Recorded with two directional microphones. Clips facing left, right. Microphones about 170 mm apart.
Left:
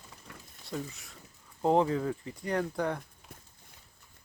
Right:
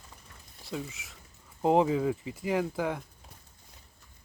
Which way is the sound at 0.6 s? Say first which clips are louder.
Right 1 dB; centre (ahead or behind).